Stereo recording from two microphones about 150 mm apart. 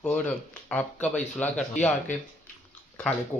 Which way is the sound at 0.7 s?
10° left (ahead or behind).